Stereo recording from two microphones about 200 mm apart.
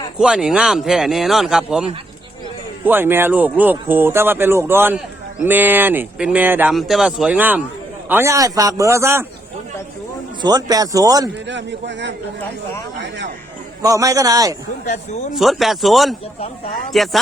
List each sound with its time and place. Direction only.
0.2 s speech: 5° right (ahead or behind)
10.4 s speech: 20° right (ahead or behind)
11.4 s a man's voice: 65° right (ahead or behind)
13.8 s speech: 15° right (ahead or behind)
15.4 s speech: centre (ahead or behind)